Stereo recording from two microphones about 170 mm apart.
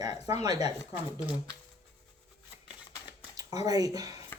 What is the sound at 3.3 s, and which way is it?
Speech, 20° right (ahead or behind).